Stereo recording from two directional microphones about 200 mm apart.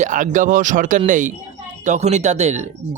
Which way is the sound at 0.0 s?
40° right (ahead or behind).